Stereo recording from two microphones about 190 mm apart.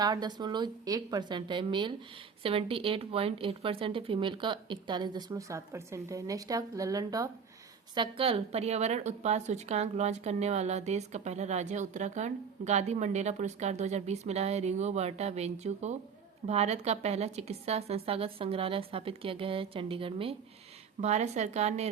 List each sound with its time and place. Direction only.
0.0 s a woman's voice: 20° right (ahead or behind)